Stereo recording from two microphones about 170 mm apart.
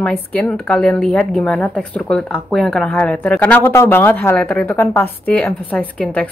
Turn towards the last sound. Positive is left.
turn(degrees=5)  # may be behind; listen again after turning